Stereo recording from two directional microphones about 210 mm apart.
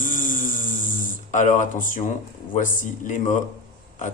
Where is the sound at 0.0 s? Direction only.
40° left (ahead or behind).